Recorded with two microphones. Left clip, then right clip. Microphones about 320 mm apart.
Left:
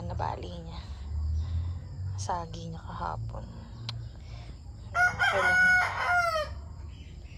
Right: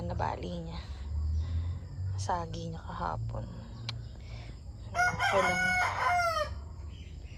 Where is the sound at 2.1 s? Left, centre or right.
Centre.